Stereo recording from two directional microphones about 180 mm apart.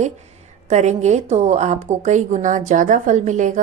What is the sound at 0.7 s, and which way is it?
A woman's voice, 40° right (ahead or behind).